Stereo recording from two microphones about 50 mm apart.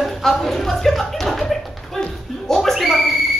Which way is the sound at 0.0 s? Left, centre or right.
Centre.